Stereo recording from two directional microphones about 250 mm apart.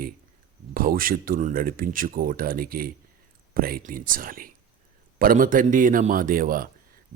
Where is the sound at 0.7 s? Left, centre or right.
Right.